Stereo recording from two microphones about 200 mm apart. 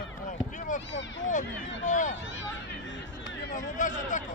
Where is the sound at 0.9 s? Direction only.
65° left (ahead or behind).